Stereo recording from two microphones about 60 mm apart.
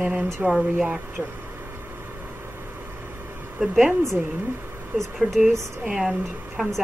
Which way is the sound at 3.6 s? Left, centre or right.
Centre.